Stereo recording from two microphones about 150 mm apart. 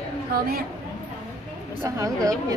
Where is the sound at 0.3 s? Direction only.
85° right.